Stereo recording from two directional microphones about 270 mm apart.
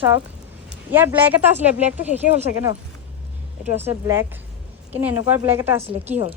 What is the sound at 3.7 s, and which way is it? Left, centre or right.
A woman's voice, centre.